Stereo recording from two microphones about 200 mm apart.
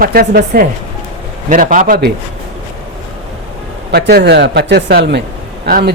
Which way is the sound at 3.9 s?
55° right (ahead or behind).